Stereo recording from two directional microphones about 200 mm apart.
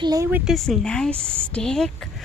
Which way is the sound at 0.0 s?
15° right (ahead or behind).